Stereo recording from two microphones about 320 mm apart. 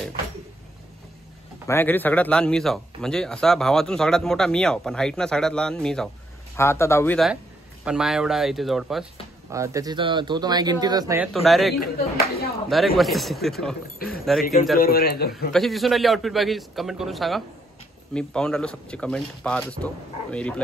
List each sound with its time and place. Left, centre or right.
1.7 s a man's voice: centre
11.8 s speech: left
12.6 s a man's voice: centre
13.9 s speech: left
15.3 s a man's voice: centre